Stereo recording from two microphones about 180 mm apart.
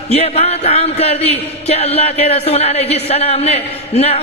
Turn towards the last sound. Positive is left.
turn(degrees=35)  # may be behind; listen again after turning